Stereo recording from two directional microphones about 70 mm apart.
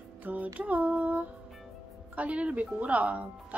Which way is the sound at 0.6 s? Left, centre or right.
Right.